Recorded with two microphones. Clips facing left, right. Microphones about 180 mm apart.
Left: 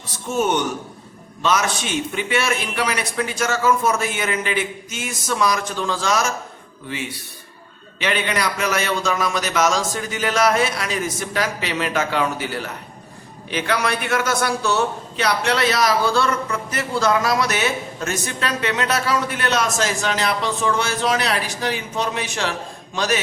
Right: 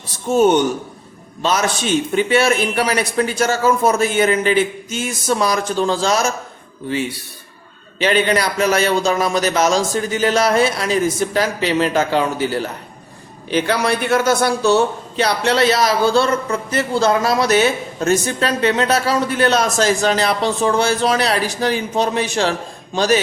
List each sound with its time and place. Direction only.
0.3 s a man's voice: 30° right (ahead or behind)
7.9 s a man's voice: 35° right (ahead or behind)